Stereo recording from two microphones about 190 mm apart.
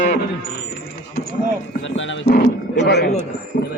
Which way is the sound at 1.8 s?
80° left.